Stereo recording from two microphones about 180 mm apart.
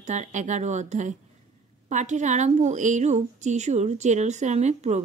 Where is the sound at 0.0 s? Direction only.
40° right (ahead or behind).